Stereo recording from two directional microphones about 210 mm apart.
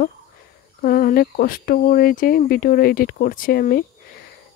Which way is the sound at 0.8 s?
45° left (ahead or behind).